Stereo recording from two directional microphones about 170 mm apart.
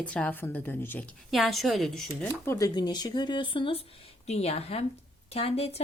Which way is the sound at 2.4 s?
20° left (ahead or behind).